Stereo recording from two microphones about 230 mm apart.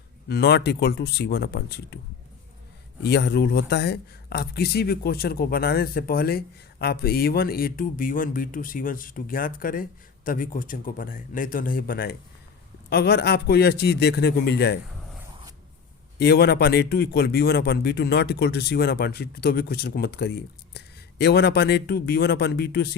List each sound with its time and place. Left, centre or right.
0.3 s a man's voice: left
3.0 s a man's voice: left
16.1 s a man's voice: left